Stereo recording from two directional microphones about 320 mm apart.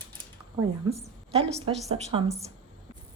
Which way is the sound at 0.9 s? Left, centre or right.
Centre.